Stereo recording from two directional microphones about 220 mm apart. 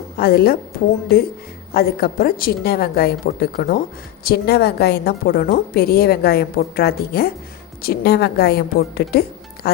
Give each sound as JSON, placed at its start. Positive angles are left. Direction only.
{"t": 0.2, "sound": "a woman's voice", "side_deg": 45}
{"t": 1.7, "sound": "a woman's voice", "side_deg": 45}